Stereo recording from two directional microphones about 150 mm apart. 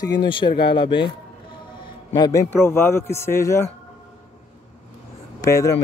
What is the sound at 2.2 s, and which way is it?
A man's voice, 20° left (ahead or behind).